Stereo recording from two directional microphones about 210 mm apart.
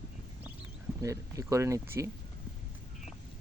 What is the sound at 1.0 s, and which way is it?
Speech, 15° right (ahead or behind).